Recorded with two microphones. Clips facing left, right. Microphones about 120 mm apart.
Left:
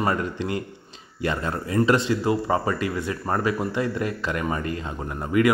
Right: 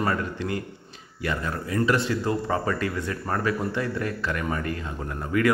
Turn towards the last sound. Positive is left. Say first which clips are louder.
# left 3 dB
turn(degrees=15)  # may be behind; listen again after turning